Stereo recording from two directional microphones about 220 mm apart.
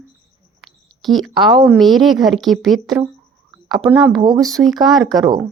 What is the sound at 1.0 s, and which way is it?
A woman's voice, centre (ahead or behind).